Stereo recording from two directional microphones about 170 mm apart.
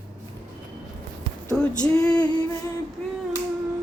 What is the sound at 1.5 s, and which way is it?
Speech, 5° left (ahead or behind).